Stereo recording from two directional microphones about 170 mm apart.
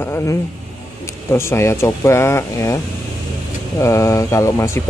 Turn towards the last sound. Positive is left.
turn(degrees=15)  # may be behind; listen again after turning